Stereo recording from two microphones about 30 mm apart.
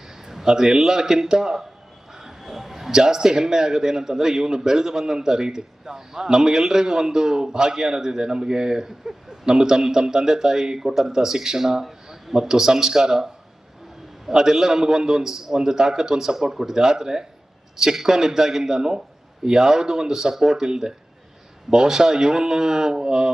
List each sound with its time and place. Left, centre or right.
0.3 s speech: centre
2.1 s a sound: centre
2.9 s a man's voice: centre